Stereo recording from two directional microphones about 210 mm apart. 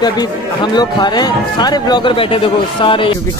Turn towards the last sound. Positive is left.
turn(degrees=25)  # may be behind; listen again after turning